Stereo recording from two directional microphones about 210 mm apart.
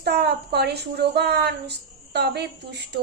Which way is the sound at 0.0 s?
50° right (ahead or behind).